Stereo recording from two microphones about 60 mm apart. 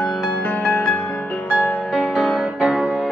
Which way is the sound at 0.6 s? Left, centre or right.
Left.